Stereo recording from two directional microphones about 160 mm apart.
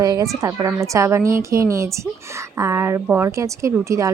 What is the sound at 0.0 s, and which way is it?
A woman's voice, 20° right (ahead or behind).